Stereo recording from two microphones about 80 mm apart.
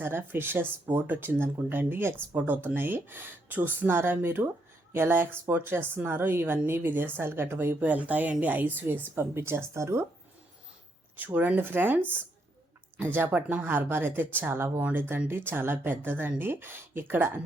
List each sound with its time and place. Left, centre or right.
0.0 s a woman's voice: right
11.2 s a woman's voice: right